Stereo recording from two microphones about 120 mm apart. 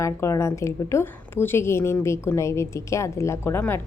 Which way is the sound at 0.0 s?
25° left (ahead or behind).